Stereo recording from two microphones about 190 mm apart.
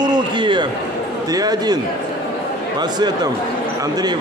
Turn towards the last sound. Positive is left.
turn(degrees=-20)  # may be behind; listen again after turning